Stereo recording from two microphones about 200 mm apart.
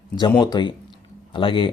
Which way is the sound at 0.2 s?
20° left (ahead or behind).